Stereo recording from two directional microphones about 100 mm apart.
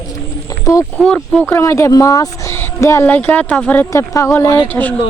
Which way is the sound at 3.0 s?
20° left (ahead or behind).